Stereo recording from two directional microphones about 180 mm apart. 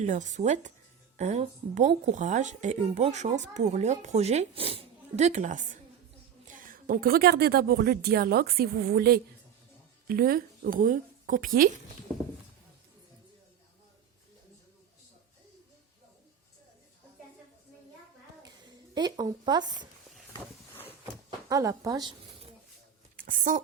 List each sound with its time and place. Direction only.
0.0 s a woman's voice: 40° right (ahead or behind)
18.9 s speech: 25° right (ahead or behind)
21.5 s speech: 20° right (ahead or behind)
23.1 s a sound: 50° right (ahead or behind)